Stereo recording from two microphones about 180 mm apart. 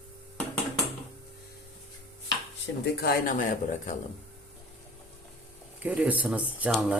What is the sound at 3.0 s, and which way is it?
Speech, 60° left (ahead or behind).